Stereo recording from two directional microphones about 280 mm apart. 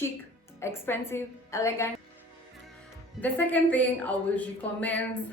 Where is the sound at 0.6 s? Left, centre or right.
Centre.